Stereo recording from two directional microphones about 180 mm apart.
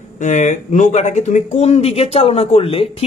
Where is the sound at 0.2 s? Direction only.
45° left (ahead or behind).